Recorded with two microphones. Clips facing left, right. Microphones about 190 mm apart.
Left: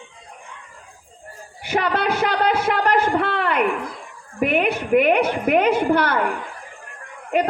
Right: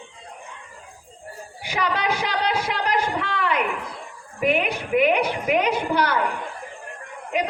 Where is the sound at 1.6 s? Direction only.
55° left (ahead or behind).